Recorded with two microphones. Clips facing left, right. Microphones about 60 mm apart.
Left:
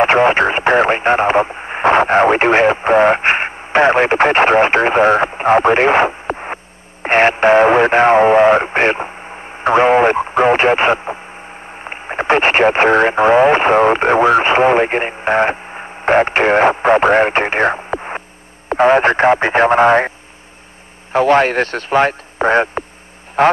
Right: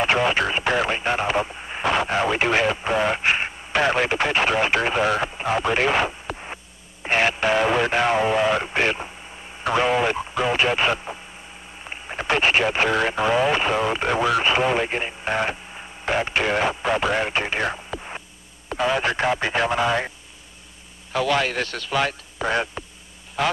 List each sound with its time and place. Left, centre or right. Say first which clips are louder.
0.0 s speech: left 9 dB; left
21.1 s speech: left 10 dB; left